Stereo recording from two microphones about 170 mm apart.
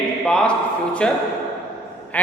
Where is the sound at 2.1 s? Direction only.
10° left (ahead or behind).